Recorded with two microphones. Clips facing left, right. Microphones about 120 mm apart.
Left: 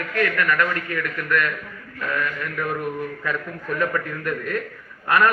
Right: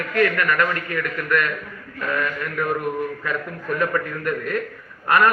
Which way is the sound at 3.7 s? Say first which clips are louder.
Right 1 dB; 15° right (ahead or behind).